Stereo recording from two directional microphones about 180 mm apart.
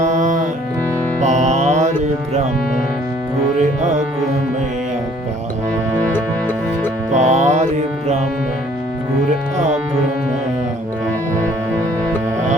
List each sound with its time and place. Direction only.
0.0 s music: 40° right (ahead or behind)
3.6 s music: 40° right (ahead or behind)
7.2 s music: 40° right (ahead or behind)